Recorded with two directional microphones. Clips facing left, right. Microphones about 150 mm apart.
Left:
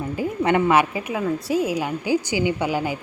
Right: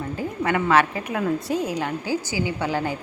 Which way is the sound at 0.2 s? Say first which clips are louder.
Left 5 dB; 20° left (ahead or behind).